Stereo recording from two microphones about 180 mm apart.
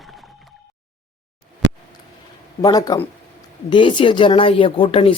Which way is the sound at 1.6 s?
85° right.